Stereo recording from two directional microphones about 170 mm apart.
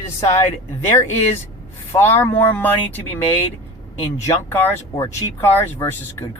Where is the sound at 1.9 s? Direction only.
15° left (ahead or behind).